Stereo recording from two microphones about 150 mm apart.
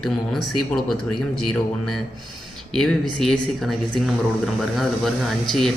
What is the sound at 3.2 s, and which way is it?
Speech, centre (ahead or behind).